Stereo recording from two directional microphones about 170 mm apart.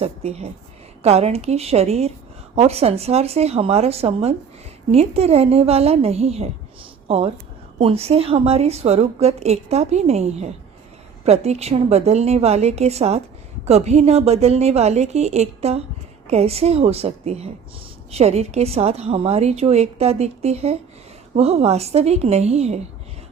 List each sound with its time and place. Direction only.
0.0 s a woman's voice: 35° right (ahead or behind)
7.8 s a woman's voice: 35° right (ahead or behind)